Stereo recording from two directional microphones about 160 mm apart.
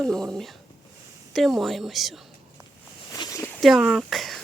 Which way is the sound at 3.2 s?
20° left (ahead or behind).